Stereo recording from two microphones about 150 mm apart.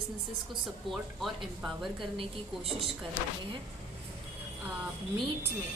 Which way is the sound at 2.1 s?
40° right (ahead or behind).